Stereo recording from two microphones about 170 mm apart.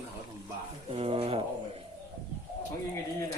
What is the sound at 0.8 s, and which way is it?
Speech, 35° right (ahead or behind).